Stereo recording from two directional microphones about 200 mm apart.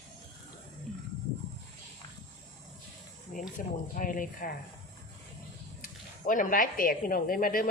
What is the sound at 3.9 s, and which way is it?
Speech, 45° left (ahead or behind).